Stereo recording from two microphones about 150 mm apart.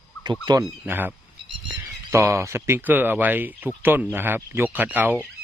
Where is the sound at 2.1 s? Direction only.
20° right (ahead or behind).